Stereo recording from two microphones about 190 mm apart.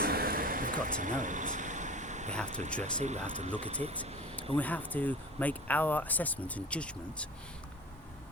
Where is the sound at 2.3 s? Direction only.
5° left (ahead or behind).